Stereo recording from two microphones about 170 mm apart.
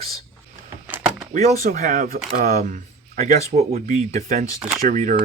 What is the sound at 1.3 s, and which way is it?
Speech, 45° right (ahead or behind).